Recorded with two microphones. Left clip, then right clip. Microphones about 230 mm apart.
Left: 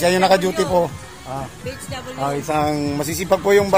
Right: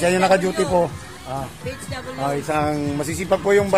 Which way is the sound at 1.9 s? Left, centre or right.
Centre.